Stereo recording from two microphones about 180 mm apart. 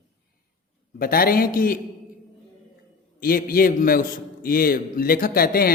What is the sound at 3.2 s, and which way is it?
A man's voice, 55° left (ahead or behind).